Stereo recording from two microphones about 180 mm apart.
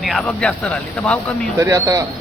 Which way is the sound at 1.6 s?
20° right (ahead or behind).